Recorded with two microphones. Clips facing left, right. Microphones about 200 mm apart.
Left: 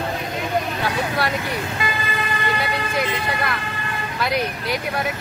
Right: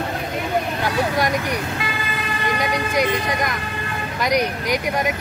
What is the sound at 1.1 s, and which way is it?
Speech, 15° right (ahead or behind).